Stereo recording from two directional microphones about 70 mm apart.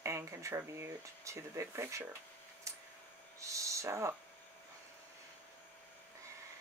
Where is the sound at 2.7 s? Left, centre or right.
Right.